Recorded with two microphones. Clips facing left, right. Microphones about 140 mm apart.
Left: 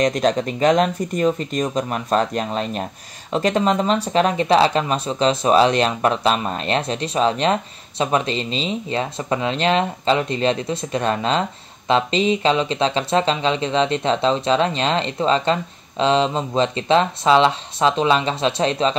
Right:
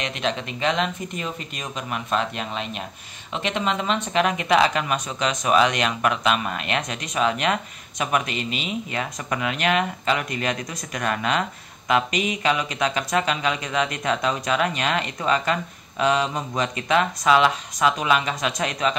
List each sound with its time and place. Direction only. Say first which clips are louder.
0.0 s speech: left 9 dB; 40° left (ahead or behind)